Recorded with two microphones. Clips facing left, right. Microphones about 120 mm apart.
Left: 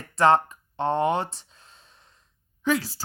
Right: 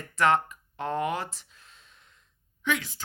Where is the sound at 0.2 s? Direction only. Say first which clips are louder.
Left 4 dB; 30° left (ahead or behind).